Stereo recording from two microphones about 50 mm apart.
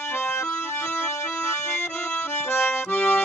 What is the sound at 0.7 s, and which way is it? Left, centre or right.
Accordion, left.